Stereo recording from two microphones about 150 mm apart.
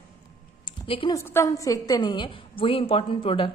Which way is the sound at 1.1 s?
20° left (ahead or behind).